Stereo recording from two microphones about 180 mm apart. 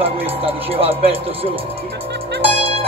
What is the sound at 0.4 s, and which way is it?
Speech, 30° right (ahead or behind).